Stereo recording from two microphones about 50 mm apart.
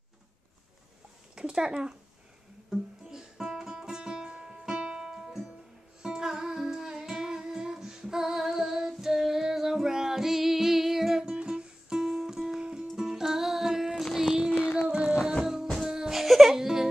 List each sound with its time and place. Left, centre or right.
1.3 s speech: centre
2.7 s music: centre
11.2 s music: centre
14.5 s child singing: left
14.9 s music: centre